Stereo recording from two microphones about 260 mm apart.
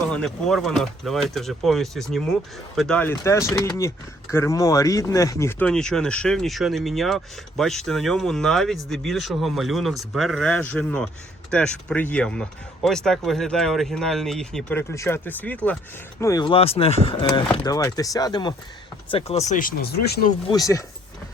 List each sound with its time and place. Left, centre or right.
0.1 s speech: centre; by 20.2 s left
20.5 s speech: centre